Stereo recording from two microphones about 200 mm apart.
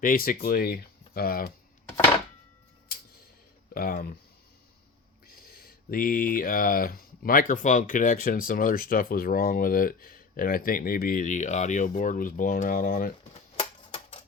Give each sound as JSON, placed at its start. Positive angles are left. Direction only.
{"t": 0.0, "sound": "speech", "side_deg": 45}
{"t": 3.8, "sound": "speech", "side_deg": 45}
{"t": 5.3, "sound": "speech", "side_deg": 50}
{"t": 13.3, "sound": "music", "side_deg": 30}